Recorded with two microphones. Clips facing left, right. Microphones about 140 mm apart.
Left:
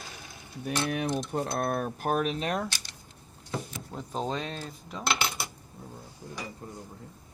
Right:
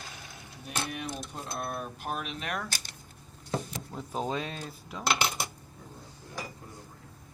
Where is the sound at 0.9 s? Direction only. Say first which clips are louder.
Left 8 dB; 55° left (ahead or behind); by 2.6 s 30° left (ahead or behind).